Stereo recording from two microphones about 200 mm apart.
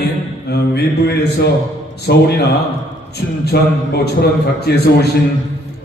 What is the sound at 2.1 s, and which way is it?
Mantra, 55° left (ahead or behind).